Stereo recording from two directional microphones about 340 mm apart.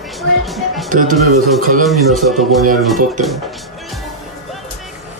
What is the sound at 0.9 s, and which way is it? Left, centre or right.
Speech, right.